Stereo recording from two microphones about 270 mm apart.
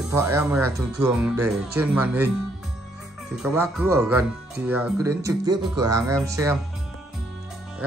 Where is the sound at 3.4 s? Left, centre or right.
Centre.